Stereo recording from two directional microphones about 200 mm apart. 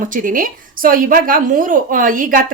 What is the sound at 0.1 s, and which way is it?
A woman's voice, 40° right (ahead or behind).